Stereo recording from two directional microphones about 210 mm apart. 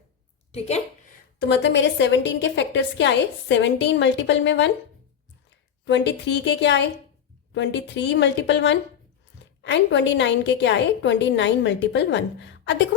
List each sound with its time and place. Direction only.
0.5 s a woman's voice: 30° left (ahead or behind)
1.4 s a woman's voice: 55° left (ahead or behind)
5.8 s a woman's voice: 55° left (ahead or behind)